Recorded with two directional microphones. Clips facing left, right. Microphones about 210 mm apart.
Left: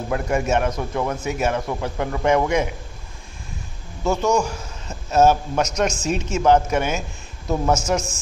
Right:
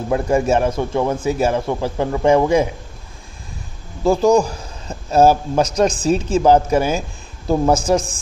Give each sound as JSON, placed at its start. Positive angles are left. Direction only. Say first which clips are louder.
{"t": 0.1, "sound": "a man's voice", "louder": "right 5 dB", "side_deg": -30}
{"t": 4.0, "sound": "a man's voice", "louder": "right 6 dB", "side_deg": -35}